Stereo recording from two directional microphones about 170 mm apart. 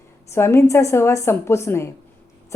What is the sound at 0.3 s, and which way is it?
Speech, 15° left (ahead or behind).